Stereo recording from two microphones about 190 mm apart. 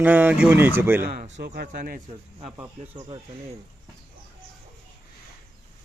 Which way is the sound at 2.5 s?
15° right (ahead or behind).